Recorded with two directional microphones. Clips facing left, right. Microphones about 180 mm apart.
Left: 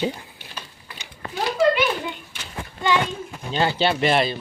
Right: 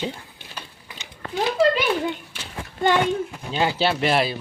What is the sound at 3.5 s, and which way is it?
Speech, 5° right (ahead or behind).